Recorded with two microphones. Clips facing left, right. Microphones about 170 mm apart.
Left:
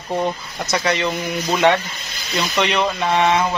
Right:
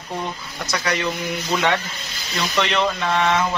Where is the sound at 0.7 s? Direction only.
25° left (ahead or behind).